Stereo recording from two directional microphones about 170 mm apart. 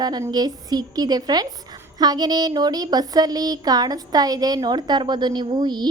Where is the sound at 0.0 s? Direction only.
25° right (ahead or behind).